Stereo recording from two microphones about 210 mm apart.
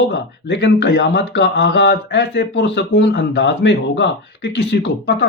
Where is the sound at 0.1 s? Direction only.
55° left (ahead or behind).